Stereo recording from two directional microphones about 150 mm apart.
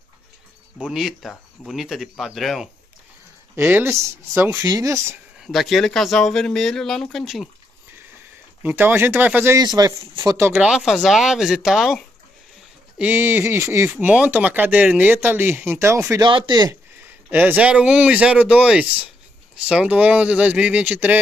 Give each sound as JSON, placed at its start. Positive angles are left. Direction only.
{"t": 0.7, "sound": "speech", "side_deg": -5}
{"t": 3.5, "sound": "speech", "side_deg": -15}
{"t": 5.4, "sound": "speech", "side_deg": 0}
{"t": 8.6, "sound": "speech", "side_deg": -15}
{"t": 9.6, "sound": "speech", "side_deg": -25}
{"t": 10.4, "sound": "speech", "side_deg": -10}
{"t": 16.2, "sound": "speech", "side_deg": -30}
{"t": 17.3, "sound": "speech", "side_deg": -10}